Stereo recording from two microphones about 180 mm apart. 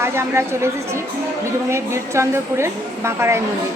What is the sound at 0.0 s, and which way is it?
Speech, 15° right (ahead or behind).